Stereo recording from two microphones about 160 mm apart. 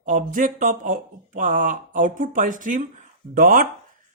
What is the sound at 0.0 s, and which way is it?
Speech, 55° right (ahead or behind).